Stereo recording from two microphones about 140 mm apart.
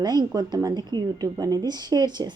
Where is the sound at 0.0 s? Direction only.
30° right (ahead or behind).